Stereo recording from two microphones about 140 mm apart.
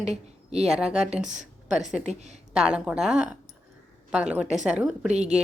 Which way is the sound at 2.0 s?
55° right (ahead or behind).